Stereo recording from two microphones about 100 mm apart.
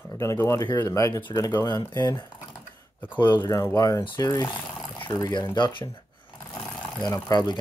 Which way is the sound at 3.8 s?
30° left (ahead or behind).